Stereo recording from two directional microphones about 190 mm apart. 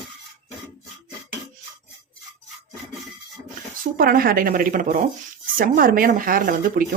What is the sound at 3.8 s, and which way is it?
Speech, 50° right (ahead or behind).